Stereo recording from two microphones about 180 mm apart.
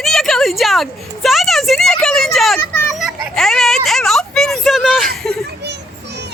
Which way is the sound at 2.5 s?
15° left (ahead or behind).